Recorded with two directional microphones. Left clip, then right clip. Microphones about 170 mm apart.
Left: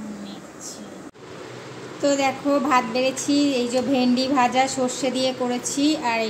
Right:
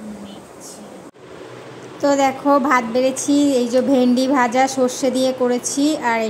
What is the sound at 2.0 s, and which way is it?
Speech, 25° right (ahead or behind).